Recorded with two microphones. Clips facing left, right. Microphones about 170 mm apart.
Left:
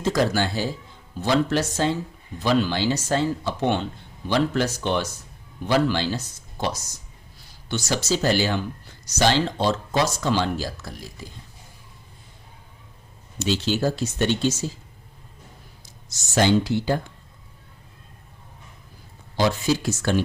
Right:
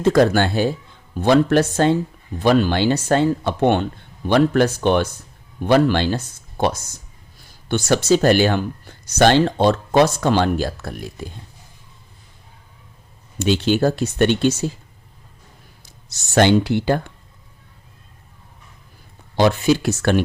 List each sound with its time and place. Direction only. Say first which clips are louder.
0.0 s speech: right 7 dB; 60° right (ahead or behind)
13.4 s speech: right 6 dB; 60° right (ahead or behind)
16.0 s speech: right 5 dB; 65° right (ahead or behind)
19.4 s speech: right 6 dB; 65° right (ahead or behind)